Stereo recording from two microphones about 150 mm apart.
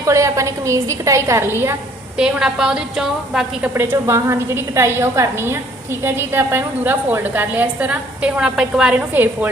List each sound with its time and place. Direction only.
0.0 s a woman's voice: 20° right (ahead or behind)
2.1 s a woman's voice: 5° right (ahead or behind)
3.8 s a woman's voice: 20° right (ahead or behind)